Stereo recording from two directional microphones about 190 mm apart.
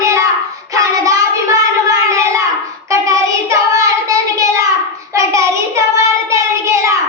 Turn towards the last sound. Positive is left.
turn(degrees=-15)  # may be behind; listen again after turning